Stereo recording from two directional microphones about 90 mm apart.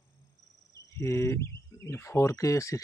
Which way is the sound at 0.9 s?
30° left (ahead or behind).